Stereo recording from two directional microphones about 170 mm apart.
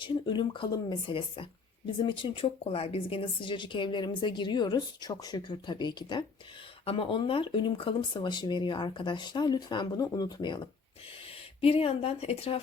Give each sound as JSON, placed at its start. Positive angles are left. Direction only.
{"t": 0.0, "sound": "a woman's voice", "side_deg": 30}